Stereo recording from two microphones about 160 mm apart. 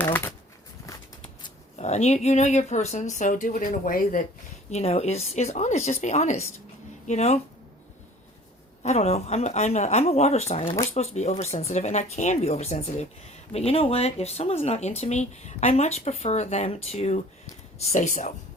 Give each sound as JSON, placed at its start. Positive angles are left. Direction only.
{"t": 0.0, "sound": "a sound", "side_deg": 10}
{"t": 1.8, "sound": "speech", "side_deg": 45}
{"t": 4.7, "sound": "speech", "side_deg": 40}
{"t": 8.8, "sound": "speech", "side_deg": 45}